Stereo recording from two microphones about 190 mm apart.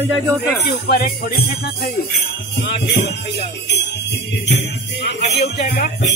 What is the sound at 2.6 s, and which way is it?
Music, 60° left (ahead or behind).